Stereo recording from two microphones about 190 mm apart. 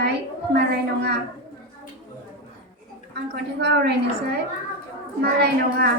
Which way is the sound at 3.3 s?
60° right (ahead or behind).